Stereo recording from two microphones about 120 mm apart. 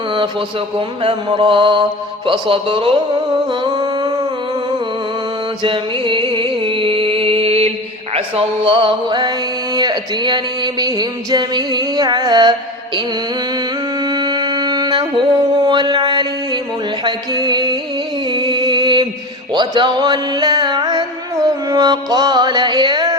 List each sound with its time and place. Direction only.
1.0 s mantra: 45° right (ahead or behind)
3.6 s a sound: 35° right (ahead or behind)
5.6 s music: 45° right (ahead or behind)
8.1 s mantra: 50° right (ahead or behind)
9.7 s a sound: 35° right (ahead or behind)
14.1 s music: 35° right (ahead or behind)
15.6 s mantra: 40° right (ahead or behind)
17.0 s music: 35° right (ahead or behind)